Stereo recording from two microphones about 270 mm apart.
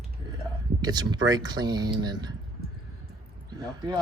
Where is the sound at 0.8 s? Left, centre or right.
Centre.